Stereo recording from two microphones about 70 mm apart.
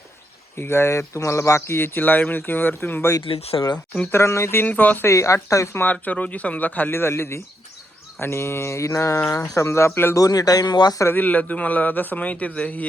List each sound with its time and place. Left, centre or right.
0.6 s speech: left
3.2 s speech: left
4.1 s speech: left
4.6 s a man's voice: left
5.0 s a woman's voice: left
5.7 s a man's voice: left
10.2 s speech: left
11.1 s a man's voice: left